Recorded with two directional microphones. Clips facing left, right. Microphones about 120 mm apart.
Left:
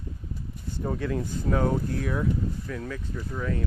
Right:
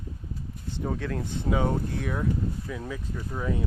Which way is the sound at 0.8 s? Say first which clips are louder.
Left 2 dB; centre (ahead or behind).